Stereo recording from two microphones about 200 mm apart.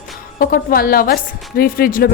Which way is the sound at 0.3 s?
45° left (ahead or behind).